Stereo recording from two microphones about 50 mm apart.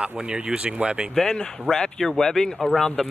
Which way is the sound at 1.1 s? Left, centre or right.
Centre.